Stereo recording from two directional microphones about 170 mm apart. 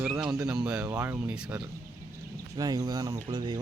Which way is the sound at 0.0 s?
5° right (ahead or behind).